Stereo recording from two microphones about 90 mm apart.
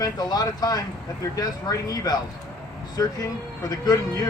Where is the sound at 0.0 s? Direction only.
45° left (ahead or behind).